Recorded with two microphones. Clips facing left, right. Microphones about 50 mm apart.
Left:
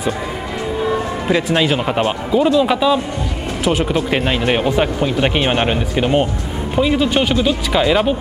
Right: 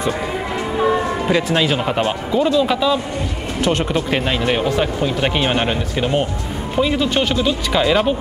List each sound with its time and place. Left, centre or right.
1.3 s speech: centre
4.2 s speech: centre